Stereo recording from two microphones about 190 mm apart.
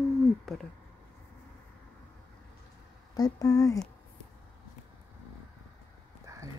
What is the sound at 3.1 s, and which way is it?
Speech, 20° left (ahead or behind).